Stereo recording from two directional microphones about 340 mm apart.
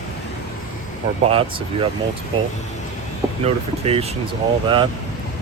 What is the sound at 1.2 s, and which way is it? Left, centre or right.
Speech, centre.